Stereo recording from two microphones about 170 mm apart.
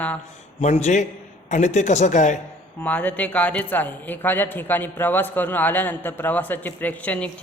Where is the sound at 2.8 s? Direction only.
10° left (ahead or behind).